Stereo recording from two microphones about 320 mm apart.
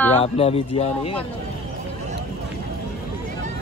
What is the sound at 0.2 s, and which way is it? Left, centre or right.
Speech, centre.